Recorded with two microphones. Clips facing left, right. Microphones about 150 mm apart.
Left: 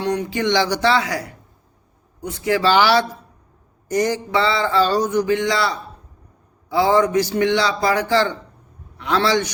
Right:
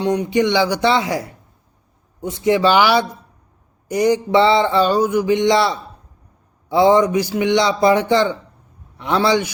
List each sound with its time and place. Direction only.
0.0 s speech: 20° right (ahead or behind)
3.8 s a sound: 10° right (ahead or behind)
9.0 s speech: 20° right (ahead or behind)